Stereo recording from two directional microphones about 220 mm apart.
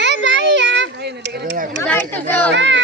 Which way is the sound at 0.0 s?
55° right (ahead or behind).